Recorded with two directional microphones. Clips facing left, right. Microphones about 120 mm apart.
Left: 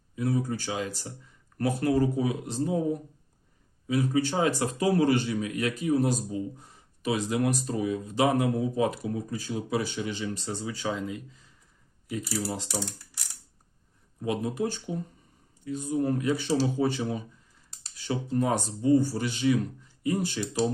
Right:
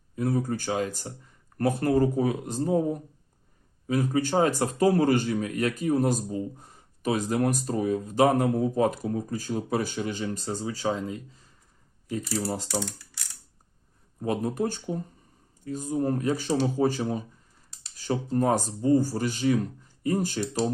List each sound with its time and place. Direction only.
0.2 s speech: 45° right (ahead or behind)
14.2 s speech: 45° right (ahead or behind)